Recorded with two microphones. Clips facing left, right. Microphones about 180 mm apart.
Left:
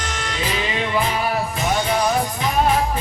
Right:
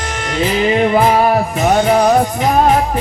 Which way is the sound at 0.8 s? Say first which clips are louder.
Right 10 dB; 50° right (ahead or behind).